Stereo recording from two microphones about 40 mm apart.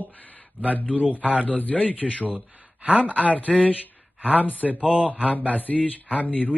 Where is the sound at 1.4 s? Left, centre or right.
Left.